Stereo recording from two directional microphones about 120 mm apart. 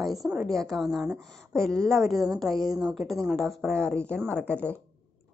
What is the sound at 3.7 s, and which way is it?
Speech, 20° right (ahead or behind).